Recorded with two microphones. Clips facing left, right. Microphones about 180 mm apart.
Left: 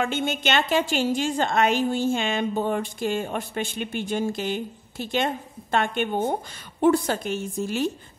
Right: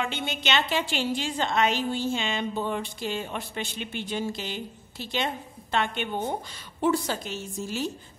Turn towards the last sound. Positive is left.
turn(degrees=60)  # may be behind; listen again after turning